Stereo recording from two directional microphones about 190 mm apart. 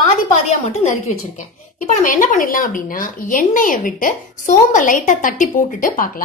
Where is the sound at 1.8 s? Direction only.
40° left (ahead or behind).